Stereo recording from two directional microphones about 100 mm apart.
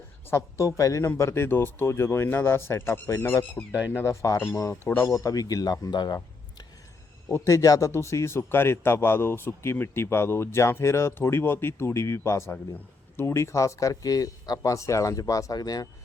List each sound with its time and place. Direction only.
0.3 s speech: 25° left (ahead or behind)
3.7 s speech: 15° right (ahead or behind)
3.9 s speech: 30° left (ahead or behind)
5.1 s speech: 35° left (ahead or behind)
7.3 s speech: 30° left (ahead or behind)